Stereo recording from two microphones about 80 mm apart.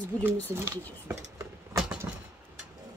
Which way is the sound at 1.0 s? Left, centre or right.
Right.